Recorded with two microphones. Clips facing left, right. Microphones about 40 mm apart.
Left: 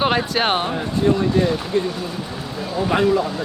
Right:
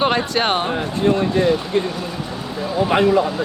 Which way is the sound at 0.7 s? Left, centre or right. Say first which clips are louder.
Right 1 dB; right.